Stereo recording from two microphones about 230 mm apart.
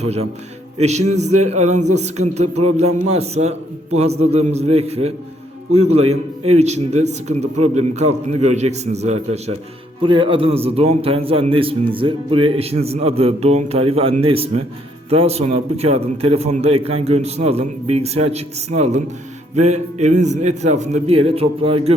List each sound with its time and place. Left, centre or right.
0.0 s a man's voice: right